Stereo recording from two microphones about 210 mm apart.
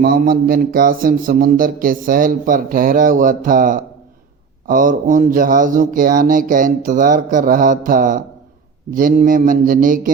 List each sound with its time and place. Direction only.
0.0 s a man's voice: 45° right (ahead or behind)